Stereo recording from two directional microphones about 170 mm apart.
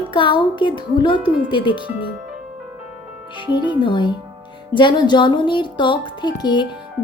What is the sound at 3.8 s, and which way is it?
Speech, 25° left (ahead or behind).